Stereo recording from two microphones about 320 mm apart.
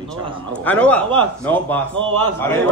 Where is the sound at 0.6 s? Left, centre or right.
Centre.